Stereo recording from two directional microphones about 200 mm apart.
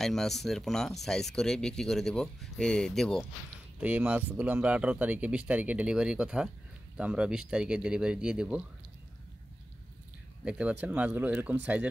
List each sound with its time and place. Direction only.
0.0 s speech: centre (ahead or behind)
10.4 s speech: 5° right (ahead or behind)